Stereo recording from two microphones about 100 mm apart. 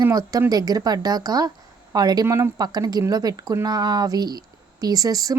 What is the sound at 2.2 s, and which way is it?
Speech, 25° right (ahead or behind).